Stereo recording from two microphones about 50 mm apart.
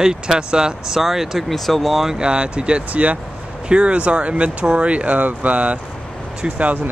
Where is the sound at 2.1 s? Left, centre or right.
Centre.